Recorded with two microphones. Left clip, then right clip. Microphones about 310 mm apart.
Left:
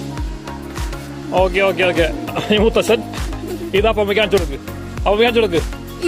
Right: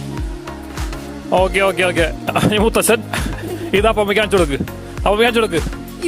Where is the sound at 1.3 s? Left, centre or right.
Right.